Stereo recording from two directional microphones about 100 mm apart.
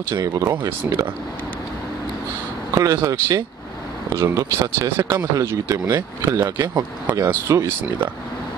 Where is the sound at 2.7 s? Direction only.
35° right (ahead or behind).